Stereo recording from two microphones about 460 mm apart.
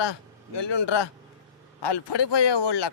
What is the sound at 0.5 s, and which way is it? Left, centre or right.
A man's voice, left.